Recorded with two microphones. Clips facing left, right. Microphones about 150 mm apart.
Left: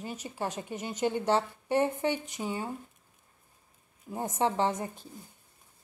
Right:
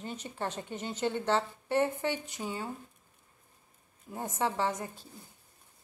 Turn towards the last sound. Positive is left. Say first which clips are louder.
# left 3 dB
turn(degrees=20)  # may be behind; listen again after turning